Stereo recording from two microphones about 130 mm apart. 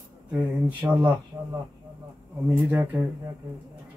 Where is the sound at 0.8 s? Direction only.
15° right (ahead or behind).